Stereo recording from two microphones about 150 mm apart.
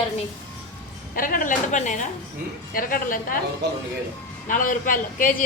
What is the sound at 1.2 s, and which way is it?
Speech, 65° left (ahead or behind).